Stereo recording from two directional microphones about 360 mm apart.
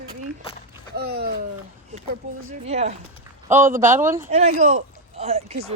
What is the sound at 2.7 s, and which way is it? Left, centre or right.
Speech, centre.